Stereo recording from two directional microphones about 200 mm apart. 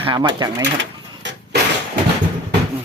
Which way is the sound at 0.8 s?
60° right (ahead or behind).